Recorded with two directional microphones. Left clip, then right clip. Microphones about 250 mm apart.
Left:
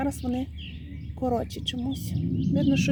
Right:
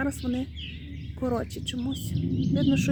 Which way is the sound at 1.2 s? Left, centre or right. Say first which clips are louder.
Left 2 dB; centre.